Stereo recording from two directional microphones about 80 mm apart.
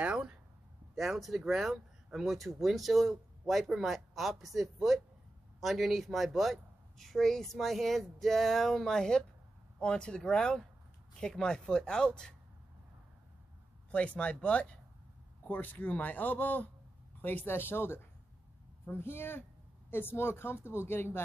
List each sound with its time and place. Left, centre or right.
0.0 s a sound: centre
0.9 s speech: centre
13.9 s a woman's voice: centre; by 21.2 s left